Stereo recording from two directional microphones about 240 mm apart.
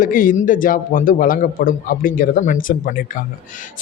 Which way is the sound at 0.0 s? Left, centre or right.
Left.